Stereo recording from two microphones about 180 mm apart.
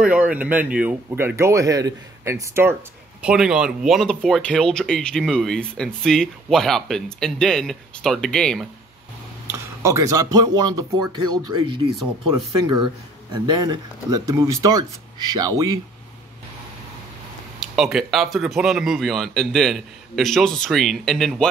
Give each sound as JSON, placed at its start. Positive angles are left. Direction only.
{"t": 0.0, "sound": "speech", "side_deg": -10}
{"t": 9.5, "sound": "speech", "side_deg": -15}
{"t": 13.3, "sound": "speech", "side_deg": -25}
{"t": 17.6, "sound": "speech", "side_deg": 0}